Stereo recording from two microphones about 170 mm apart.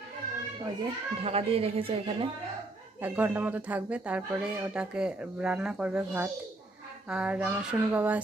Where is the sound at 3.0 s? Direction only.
10° right (ahead or behind).